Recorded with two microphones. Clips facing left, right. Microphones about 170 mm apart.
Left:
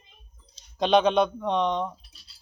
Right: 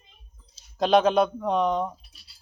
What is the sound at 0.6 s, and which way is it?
A man's voice, centre (ahead or behind).